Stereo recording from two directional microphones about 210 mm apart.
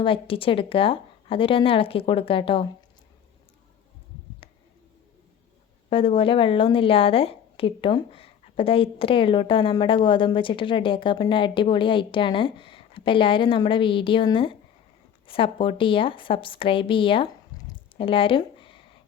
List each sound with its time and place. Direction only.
0.0 s a woman's voice: 25° left (ahead or behind)
5.9 s a woman's voice: 25° left (ahead or behind)